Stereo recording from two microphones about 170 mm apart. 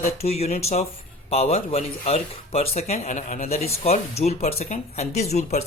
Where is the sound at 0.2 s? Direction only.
40° left (ahead or behind).